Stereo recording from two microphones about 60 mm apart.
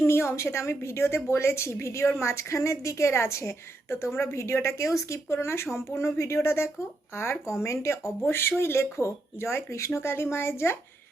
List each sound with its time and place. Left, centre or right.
0.0 s a woman's voice: left